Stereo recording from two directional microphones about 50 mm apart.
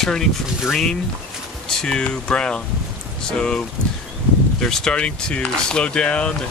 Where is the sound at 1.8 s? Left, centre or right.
Centre.